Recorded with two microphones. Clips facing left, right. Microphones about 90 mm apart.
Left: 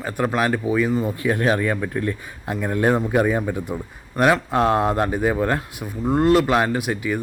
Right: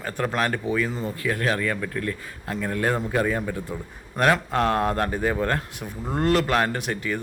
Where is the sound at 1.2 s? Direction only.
20° left (ahead or behind).